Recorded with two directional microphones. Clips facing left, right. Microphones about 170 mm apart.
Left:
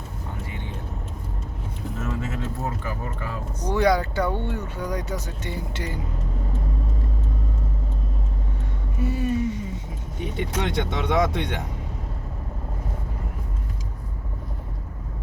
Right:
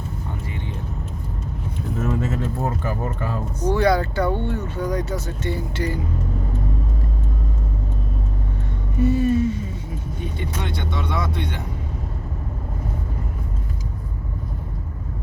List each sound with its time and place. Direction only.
2.0 s a sound: 45° right (ahead or behind)
3.7 s speech: 15° left (ahead or behind)
9.0 s speech: 10° left (ahead or behind)
10.2 s speech: 90° left